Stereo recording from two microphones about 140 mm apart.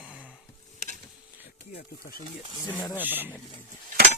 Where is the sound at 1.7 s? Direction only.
90° left.